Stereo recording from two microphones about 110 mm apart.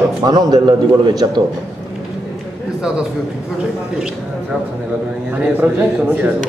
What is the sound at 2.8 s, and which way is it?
A man's voice, 10° right (ahead or behind).